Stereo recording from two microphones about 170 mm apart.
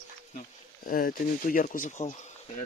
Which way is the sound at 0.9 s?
55° left (ahead or behind).